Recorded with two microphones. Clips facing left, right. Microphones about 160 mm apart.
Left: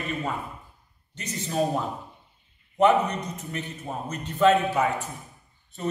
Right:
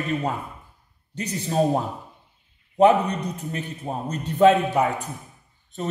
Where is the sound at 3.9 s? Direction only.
40° right (ahead or behind).